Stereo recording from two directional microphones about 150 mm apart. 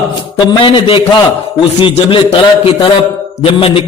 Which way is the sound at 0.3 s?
35° left (ahead or behind).